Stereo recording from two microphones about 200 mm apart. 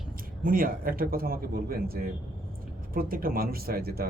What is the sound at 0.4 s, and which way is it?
Speech, 45° right (ahead or behind).